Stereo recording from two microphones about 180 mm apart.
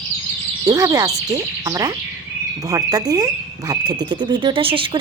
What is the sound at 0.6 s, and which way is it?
Speech, 20° right (ahead or behind).